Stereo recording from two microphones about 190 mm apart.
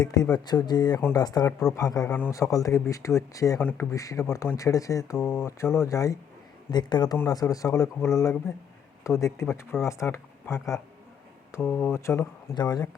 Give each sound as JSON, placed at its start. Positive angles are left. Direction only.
{"t": 0.0, "sound": "speech", "side_deg": 20}
{"t": 11.5, "sound": "speech", "side_deg": 10}